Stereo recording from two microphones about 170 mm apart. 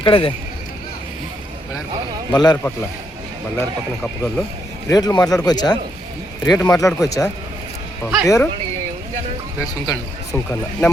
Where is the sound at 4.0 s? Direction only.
5° left (ahead or behind).